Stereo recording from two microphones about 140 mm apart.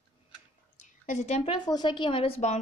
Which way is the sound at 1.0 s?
60° left (ahead or behind).